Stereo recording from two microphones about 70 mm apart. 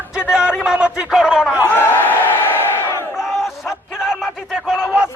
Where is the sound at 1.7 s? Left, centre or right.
Left.